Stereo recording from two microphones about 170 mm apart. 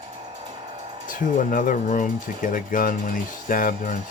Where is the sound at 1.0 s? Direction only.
50° left (ahead or behind).